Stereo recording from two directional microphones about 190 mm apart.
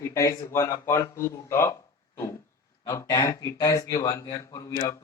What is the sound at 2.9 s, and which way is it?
A man's voice, 20° left (ahead or behind).